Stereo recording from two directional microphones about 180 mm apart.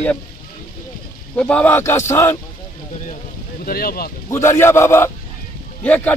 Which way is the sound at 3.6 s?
55° left (ahead or behind).